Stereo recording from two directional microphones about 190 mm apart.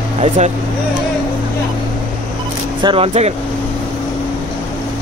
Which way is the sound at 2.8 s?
25° right (ahead or behind).